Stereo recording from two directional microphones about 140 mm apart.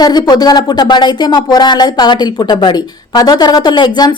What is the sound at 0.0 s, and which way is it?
Speech, 30° left (ahead or behind).